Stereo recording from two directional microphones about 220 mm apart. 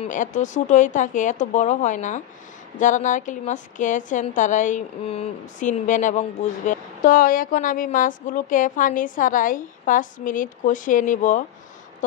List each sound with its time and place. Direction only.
0.0 s a woman's voice: 35° left (ahead or behind)